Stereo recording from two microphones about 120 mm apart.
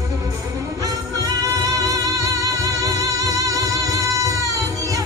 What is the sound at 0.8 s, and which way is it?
Music, 30° right (ahead or behind).